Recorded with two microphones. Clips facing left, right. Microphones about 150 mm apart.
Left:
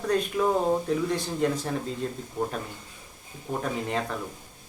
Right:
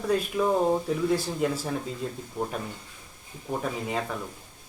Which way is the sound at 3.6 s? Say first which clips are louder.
Left 2 dB; 5° right (ahead or behind).